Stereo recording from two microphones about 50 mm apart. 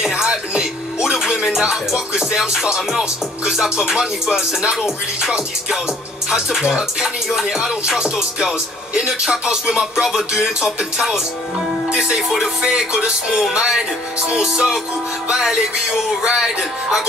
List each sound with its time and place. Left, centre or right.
0.0 s music: centre
12.2 s music: centre